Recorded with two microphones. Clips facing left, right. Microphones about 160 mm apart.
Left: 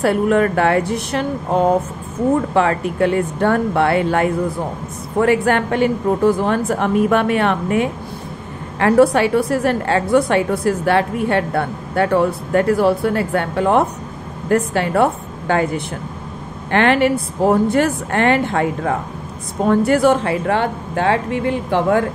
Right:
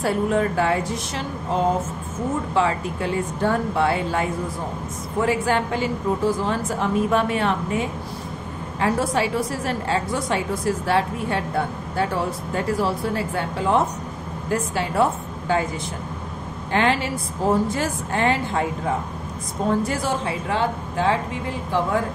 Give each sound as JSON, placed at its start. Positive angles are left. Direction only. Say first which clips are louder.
{"t": 0.0, "sound": "a woman's voice", "louder": "left 6 dB", "side_deg": 70}